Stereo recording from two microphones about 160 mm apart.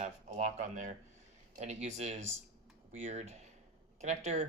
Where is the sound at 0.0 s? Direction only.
50° right (ahead or behind).